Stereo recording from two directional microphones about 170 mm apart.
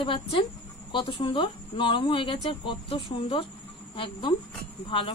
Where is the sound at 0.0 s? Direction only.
30° left (ahead or behind).